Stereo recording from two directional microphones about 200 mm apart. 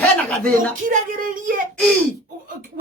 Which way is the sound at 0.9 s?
45° right (ahead or behind).